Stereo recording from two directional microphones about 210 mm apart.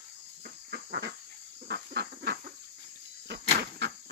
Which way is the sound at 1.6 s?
50° right (ahead or behind).